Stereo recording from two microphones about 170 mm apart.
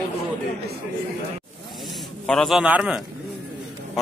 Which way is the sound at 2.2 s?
Centre (ahead or behind).